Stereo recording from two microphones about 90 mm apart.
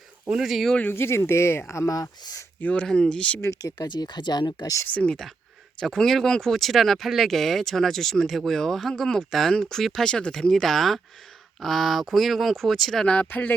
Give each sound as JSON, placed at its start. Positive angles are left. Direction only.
{"t": 0.3, "sound": "speech", "side_deg": -5}
{"t": 0.8, "sound": "speech", "side_deg": 25}
{"t": 2.6, "sound": "speech", "side_deg": 15}
{"t": 3.4, "sound": "speech", "side_deg": 35}
{"t": 3.8, "sound": "speech", "side_deg": 55}
{"t": 4.9, "sound": "speech", "side_deg": 10}
{"t": 13.3, "sound": "speech", "side_deg": 20}